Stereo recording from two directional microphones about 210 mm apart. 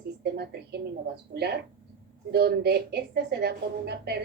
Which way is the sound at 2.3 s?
50° right (ahead or behind).